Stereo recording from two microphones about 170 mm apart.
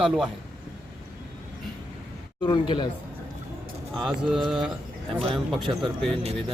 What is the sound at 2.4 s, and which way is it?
Speech, 25° left (ahead or behind).